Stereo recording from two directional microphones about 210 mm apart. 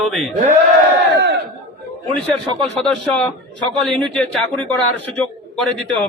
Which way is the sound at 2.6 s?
5° left (ahead or behind).